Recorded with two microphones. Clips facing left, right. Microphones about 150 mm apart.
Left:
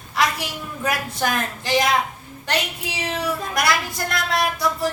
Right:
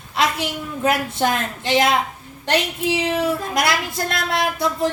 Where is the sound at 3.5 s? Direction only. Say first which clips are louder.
Right 1 dB; 25° right (ahead or behind).